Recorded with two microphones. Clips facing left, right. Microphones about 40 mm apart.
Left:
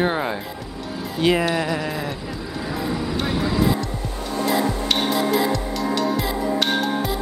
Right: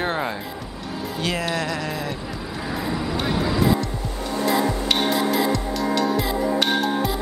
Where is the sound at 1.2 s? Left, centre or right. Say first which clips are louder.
Left 6 dB; centre.